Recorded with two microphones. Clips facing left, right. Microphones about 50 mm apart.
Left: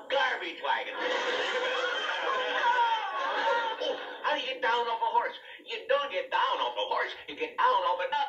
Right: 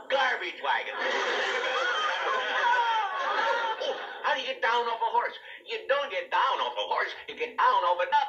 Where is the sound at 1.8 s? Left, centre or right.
Right.